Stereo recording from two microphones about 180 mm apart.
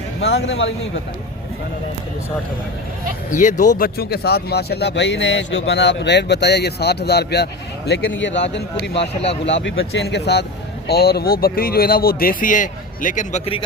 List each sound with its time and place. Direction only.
0.2 s speech: 70° left (ahead or behind)
3.3 s speech: 45° left (ahead or behind)
3.8 s speech: 55° left (ahead or behind)
7.9 s speech: 80° left; by 9.0 s 65° left (ahead or behind)
9.0 s speech: 30° left (ahead or behind)
9.5 s speech: 85° left; by 13.4 s 45° left (ahead or behind)
13.4 s speech: 30° left (ahead or behind)